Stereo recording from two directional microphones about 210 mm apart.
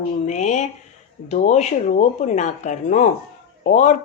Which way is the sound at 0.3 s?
35° left (ahead or behind).